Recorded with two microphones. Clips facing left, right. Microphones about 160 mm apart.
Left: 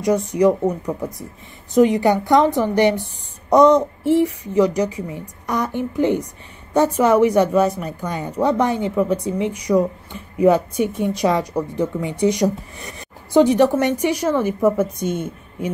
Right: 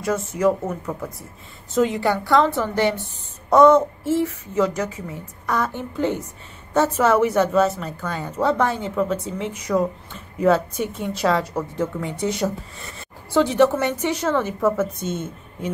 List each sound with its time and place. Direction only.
0.0 s a woman's voice: 15° left (ahead or behind)